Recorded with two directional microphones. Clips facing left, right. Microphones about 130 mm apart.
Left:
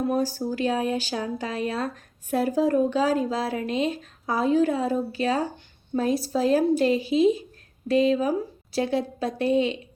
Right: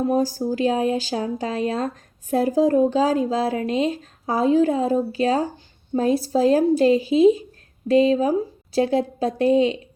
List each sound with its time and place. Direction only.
0.1 s a woman's voice: 40° right (ahead or behind)